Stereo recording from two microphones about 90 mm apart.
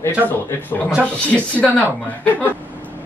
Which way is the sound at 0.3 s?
25° left (ahead or behind).